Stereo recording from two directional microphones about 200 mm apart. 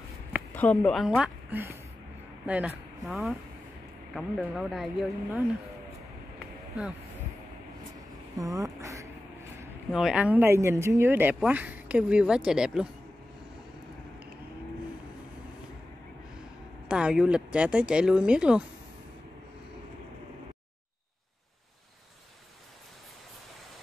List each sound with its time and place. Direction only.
0.6 s speech: 5° left (ahead or behind)
8.4 s speech: 15° right (ahead or behind)
9.9 s speech: 5° right (ahead or behind)
16.8 s speech: 5° right (ahead or behind)